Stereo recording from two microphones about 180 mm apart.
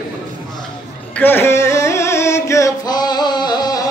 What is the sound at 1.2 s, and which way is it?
Carnatic music, 10° left (ahead or behind).